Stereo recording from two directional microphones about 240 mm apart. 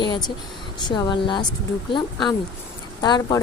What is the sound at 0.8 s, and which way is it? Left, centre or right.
Speech, centre.